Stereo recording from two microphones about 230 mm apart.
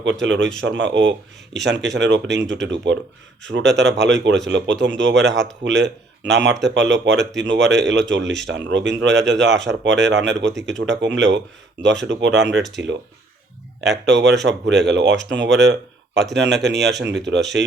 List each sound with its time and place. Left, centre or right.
0.0 s speech: right
14.0 s speech: right